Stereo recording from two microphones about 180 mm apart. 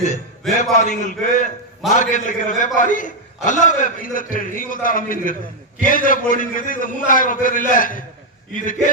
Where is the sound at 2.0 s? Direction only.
45° left (ahead or behind).